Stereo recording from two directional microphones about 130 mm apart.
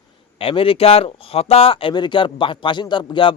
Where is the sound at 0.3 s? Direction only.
45° left (ahead or behind).